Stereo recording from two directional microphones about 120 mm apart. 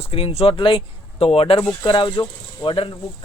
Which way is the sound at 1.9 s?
45° left (ahead or behind).